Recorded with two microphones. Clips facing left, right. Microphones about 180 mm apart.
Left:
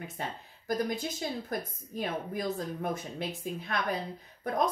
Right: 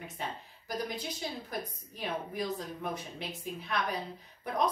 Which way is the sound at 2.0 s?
45° left (ahead or behind).